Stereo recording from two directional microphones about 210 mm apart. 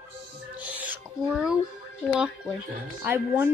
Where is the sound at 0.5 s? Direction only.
5° right (ahead or behind).